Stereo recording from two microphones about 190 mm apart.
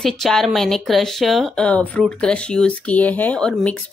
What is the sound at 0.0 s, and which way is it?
Speech, centre (ahead or behind).